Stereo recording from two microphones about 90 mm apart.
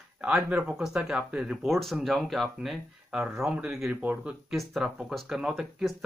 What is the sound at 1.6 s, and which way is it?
Speech, centre (ahead or behind).